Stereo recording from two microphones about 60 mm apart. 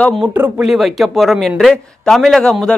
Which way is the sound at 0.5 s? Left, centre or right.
Centre.